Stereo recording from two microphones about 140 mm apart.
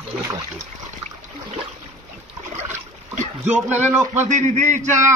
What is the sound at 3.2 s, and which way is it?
Boat, 55° right (ahead or behind).